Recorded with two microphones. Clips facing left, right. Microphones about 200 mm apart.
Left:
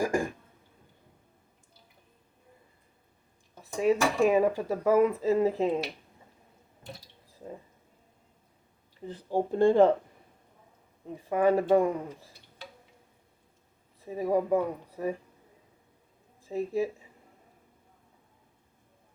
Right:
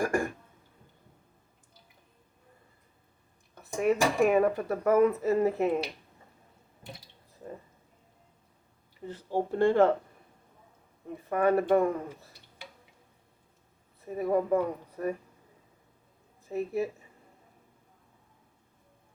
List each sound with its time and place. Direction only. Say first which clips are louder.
3.6 s speech: left 1 dB; 10° left (ahead or behind)
9.0 s speech: left 1 dB; 15° left (ahead or behind)
11.3 s speech: left 1 dB; 15° left (ahead or behind)
14.0 s speech: even; 10° left (ahead or behind)
16.5 s speech: left 1 dB; 15° left (ahead or behind)